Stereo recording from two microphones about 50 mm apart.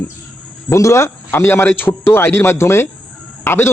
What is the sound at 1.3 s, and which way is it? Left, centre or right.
Speech, left.